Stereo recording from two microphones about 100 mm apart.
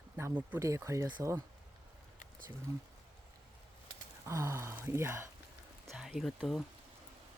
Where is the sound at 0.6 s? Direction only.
30° right (ahead or behind).